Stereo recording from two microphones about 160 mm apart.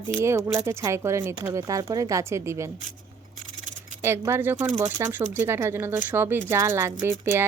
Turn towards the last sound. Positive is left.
turn(degrees=-15)  # may be behind; listen again after turning